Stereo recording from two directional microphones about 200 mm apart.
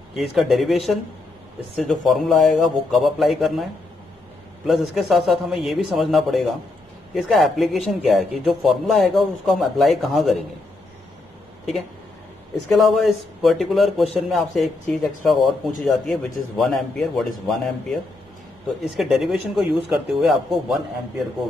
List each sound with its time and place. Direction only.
0.1 s speech: centre (ahead or behind)
4.6 s speech: centre (ahead or behind)
12.6 s speech: centre (ahead or behind)